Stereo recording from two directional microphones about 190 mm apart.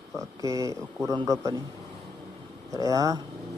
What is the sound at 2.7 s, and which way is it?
Speech, 15° right (ahead or behind).